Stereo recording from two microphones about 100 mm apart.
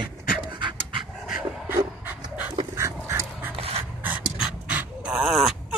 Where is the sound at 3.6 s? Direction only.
75° right (ahead or behind).